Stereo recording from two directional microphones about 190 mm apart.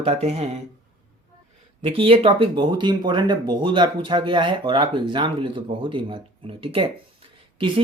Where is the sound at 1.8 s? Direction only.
30° right (ahead or behind).